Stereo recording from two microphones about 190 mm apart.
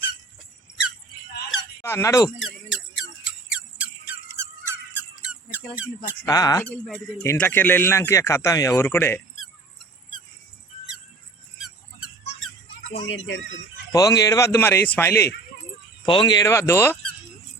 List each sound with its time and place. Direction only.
1.5 s squeak: 15° left (ahead or behind)
2.4 s a sound: 5° right (ahead or behind)
4.4 s squeak: 10° right (ahead or behind)
6.2 s speech: 20° left (ahead or behind)
11.5 s squeak: 5° right (ahead or behind)
13.0 s speech: 80° left
13.9 s speech: 20° left (ahead or behind)
16.0 s speech: 25° left (ahead or behind)